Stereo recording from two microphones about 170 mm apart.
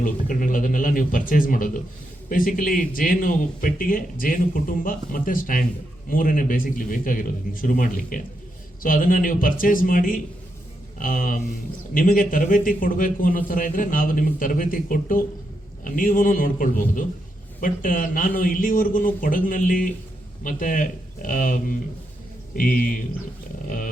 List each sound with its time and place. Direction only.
0.0 s a man's voice: 50° left (ahead or behind)